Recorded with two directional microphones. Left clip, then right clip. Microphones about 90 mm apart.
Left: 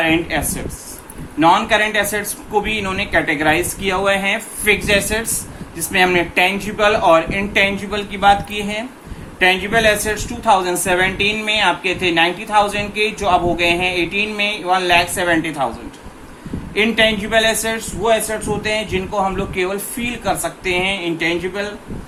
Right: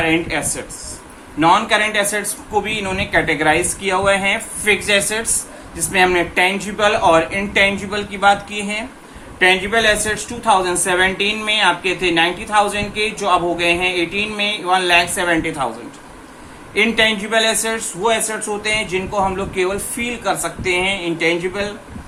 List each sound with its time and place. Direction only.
0.0 s a woman's voice: 20° left (ahead or behind)
16.7 s a woman's voice: 20° left (ahead or behind)
21.2 s a woman's voice: 20° left (ahead or behind)